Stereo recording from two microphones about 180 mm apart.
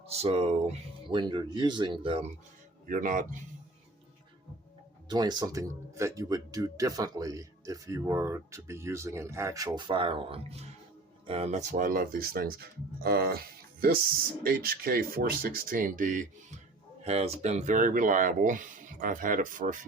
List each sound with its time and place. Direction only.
0.1 s speech: 35° right (ahead or behind)
2.8 s speech: 45° right (ahead or behind)
5.0 s speech: 20° right (ahead or behind); by 16.6 s 45° right (ahead or behind)
17.0 s speech: 35° right (ahead or behind)